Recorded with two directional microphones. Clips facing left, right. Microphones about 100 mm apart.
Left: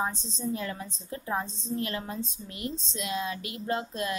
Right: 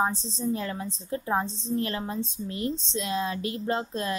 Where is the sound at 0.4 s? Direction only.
35° right (ahead or behind).